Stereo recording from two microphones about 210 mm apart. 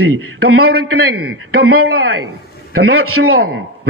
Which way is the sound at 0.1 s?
85° right.